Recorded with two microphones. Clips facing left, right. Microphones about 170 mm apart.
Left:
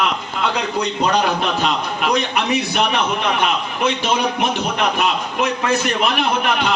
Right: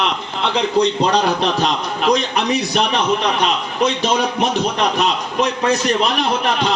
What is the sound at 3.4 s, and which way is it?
A man's voice, 35° right (ahead or behind).